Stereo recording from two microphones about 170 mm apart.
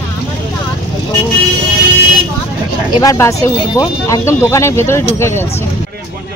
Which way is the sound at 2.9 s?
20° left (ahead or behind).